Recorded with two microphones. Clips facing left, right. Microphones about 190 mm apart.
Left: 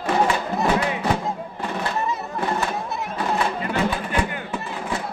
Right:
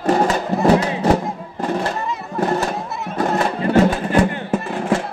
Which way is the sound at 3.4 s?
40° right (ahead or behind).